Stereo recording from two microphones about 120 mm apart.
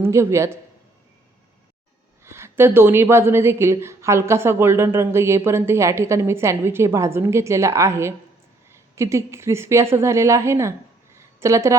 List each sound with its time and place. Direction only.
0.0 s a woman's voice: 25° right (ahead or behind)
2.2 s a woman's voice: 20° right (ahead or behind)
11.2 s a sound: 25° right (ahead or behind)